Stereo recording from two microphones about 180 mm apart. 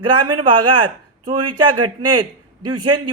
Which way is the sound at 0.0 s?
25° right (ahead or behind).